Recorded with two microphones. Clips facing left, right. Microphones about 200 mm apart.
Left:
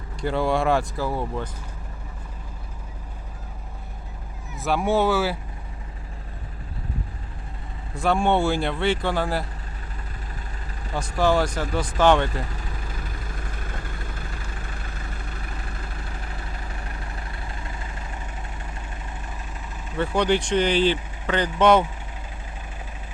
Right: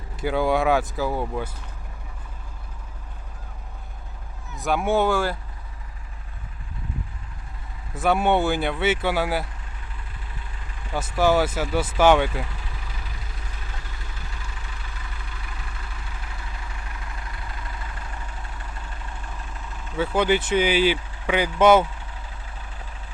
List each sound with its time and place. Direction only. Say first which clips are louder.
0.2 s speech: right 1 dB; centre (ahead or behind)
4.5 s speech: even; centre (ahead or behind)
7.9 s speech: right 1 dB; 5° right (ahead or behind)
10.9 s speech: right 1 dB; 5° right (ahead or behind)
13.0 s vehicle: left 5 dB; 50° left (ahead or behind)
20.0 s speech: even; 5° right (ahead or behind)